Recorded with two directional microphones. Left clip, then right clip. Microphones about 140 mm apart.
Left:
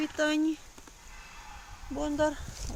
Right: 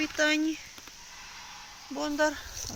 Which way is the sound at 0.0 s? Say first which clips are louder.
Right 2 dB; 30° left (ahead or behind).